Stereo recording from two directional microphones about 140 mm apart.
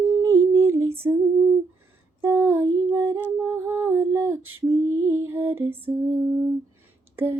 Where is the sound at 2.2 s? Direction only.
20° right (ahead or behind).